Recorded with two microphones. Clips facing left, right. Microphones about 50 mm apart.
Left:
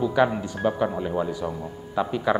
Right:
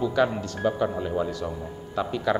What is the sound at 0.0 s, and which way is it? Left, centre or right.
A man's voice, centre.